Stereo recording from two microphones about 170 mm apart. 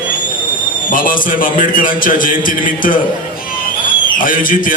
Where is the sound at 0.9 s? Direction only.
55° left (ahead or behind).